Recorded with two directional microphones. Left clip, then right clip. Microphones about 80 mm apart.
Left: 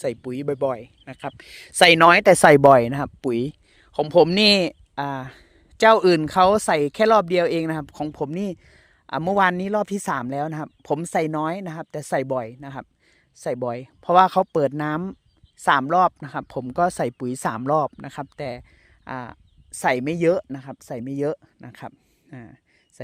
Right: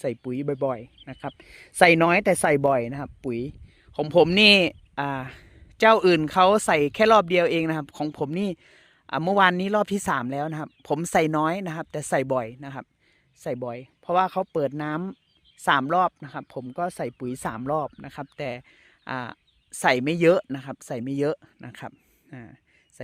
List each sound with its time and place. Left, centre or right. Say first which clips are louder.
0.0 s speech: left 2 dB; left
1.6 s speech: left 5 dB; left
4.0 s speech: left 1 dB; left; by 5.5 s centre
5.7 s speech: left 2 dB; left; by 8.5 s centre
8.6 s a sound: left 1 dB; left
9.2 s speech: even; centre
10.2 s speech: left 2 dB; left
11.0 s speech: right 3 dB; centre
13.4 s speech: left 5 dB; left
14.8 s speech: left 4 dB; left
17.9 s speech: left 4 dB; left
18.3 s speech: left 1 dB; centre
19.8 s speech: even; centre
21.2 s speech: left 1 dB; centre